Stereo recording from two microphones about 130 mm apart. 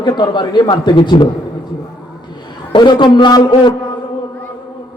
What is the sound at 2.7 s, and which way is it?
A man's voice, 35° left (ahead or behind).